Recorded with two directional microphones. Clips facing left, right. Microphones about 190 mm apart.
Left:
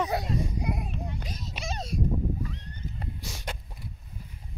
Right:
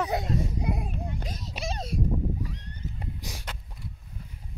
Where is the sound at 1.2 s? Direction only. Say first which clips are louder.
Right 2 dB; 40° right (ahead or behind).